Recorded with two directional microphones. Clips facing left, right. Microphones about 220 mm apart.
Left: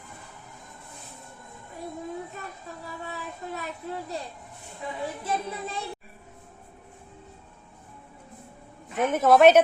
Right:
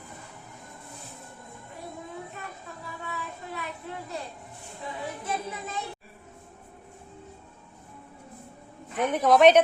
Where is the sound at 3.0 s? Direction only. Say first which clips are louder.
Left 1 dB; 40° left (ahead or behind).